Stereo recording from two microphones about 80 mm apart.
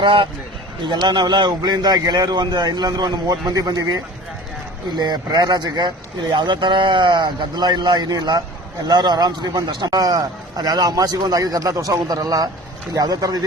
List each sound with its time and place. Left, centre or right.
0.0 s a man's voice: right
0.9 s a man's voice: right
4.9 s a man's voice: right
6.3 s a man's voice: right